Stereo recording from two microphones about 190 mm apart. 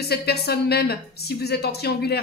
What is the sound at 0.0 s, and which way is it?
A woman's voice, 55° left (ahead or behind).